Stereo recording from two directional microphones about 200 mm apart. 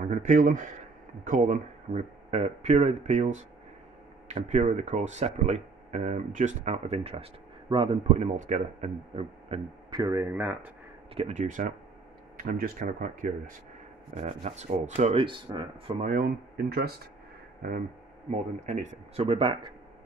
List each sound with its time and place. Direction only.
0.0 s a man's voice: 40° right (ahead or behind); by 10.7 s 10° right (ahead or behind)
11.1 s speech: 35° right (ahead or behind)
16.0 s speech: 45° right (ahead or behind)
18.3 s a man's voice: 35° right (ahead or behind)